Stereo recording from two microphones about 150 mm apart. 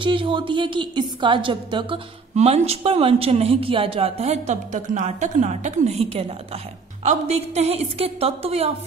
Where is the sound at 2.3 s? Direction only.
45° right (ahead or behind).